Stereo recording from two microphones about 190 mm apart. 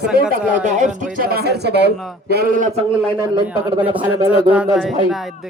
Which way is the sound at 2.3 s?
50° right (ahead or behind).